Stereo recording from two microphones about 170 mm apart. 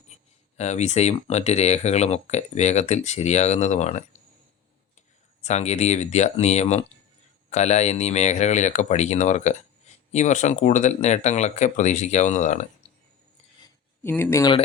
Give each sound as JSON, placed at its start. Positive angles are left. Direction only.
{"t": 0.5, "sound": "speech", "side_deg": 40}
{"t": 5.4, "sound": "speech", "side_deg": 40}
{"t": 14.0, "sound": "speech", "side_deg": 15}